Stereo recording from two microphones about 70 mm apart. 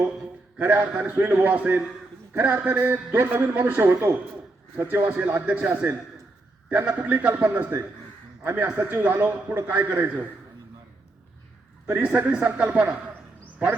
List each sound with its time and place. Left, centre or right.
0.6 s a man's voice: right
7.5 s a man's voice: right
11.9 s a man's voice: centre